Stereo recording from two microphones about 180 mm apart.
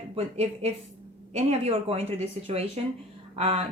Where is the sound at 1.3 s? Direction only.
40° right (ahead or behind).